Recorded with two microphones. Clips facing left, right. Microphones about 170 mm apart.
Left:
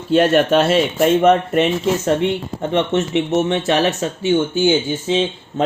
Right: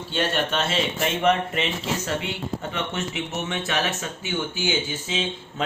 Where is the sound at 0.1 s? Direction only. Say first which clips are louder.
Left 12 dB; 55° left (ahead or behind).